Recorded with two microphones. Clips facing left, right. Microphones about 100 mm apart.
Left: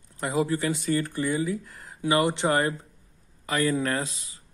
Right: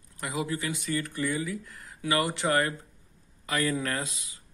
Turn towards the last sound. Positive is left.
turn(degrees=35)  # may be behind; listen again after turning